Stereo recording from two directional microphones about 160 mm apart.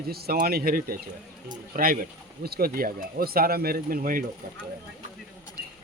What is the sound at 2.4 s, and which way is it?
Speech, 70° right (ahead or behind).